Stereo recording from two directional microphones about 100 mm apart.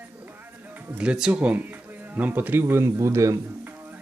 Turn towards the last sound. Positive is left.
turn(degrees=-30)  # may be behind; listen again after turning